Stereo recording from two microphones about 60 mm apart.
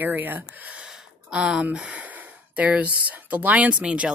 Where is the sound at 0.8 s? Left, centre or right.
Centre.